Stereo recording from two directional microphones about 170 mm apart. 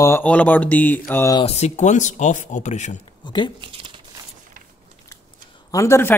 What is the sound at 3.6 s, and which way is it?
Crumpling, 30° right (ahead or behind).